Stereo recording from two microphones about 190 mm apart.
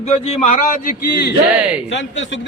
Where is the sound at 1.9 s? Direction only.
75° left (ahead or behind).